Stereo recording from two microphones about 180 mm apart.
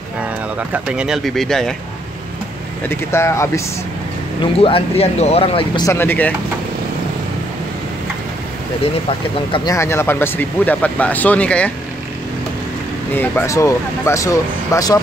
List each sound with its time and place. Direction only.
0.8 s speech: 5° right (ahead or behind)
2.9 s speech: 15° left (ahead or behind)
4.4 s speech: 30° left (ahead or behind)
5.9 s speech: 10° left (ahead or behind)
9.5 s speech: 15° left (ahead or behind)
13.1 s speech: 10° left (ahead or behind)